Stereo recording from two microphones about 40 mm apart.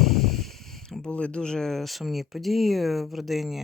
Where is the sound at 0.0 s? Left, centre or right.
Centre.